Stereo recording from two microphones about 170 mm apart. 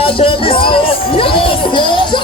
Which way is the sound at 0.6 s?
30° left (ahead or behind).